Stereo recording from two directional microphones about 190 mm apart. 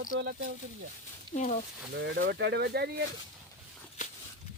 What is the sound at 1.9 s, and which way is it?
Speech, 60° right (ahead or behind).